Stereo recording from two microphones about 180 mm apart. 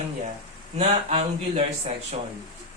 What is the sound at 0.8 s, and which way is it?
Speech, 30° right (ahead or behind).